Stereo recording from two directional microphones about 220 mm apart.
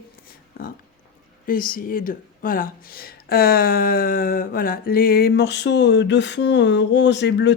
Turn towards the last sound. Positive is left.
turn(degrees=50)  # may be behind; listen again after turning